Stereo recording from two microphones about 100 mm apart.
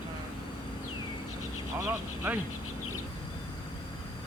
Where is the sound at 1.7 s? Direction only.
20° right (ahead or behind).